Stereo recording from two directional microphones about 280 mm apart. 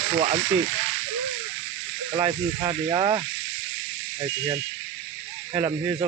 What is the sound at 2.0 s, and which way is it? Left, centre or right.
Speech, centre.